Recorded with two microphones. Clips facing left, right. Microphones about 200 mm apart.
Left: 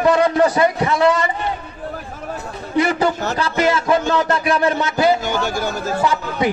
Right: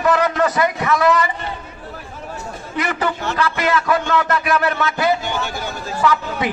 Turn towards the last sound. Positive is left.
turn(degrees=25)  # may be behind; listen again after turning